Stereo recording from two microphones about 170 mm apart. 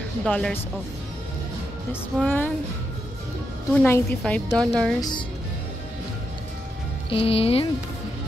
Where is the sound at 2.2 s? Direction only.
10° left (ahead or behind).